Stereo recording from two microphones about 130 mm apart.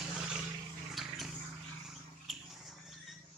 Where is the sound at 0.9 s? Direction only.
Centre (ahead or behind).